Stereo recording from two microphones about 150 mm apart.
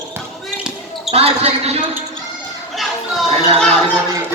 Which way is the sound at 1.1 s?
45° right (ahead or behind).